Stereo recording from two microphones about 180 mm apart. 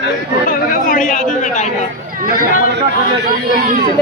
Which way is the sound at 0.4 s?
50° left (ahead or behind).